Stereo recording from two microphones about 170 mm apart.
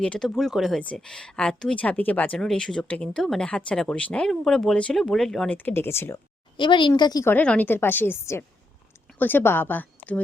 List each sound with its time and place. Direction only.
0.0 s speech: 5° left (ahead or behind)
6.6 s a woman's voice: 30° left (ahead or behind)
7.3 s a woman's voice: 10° left (ahead or behind)